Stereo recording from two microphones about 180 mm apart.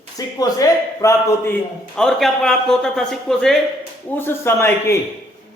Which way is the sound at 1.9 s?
Centre (ahead or behind).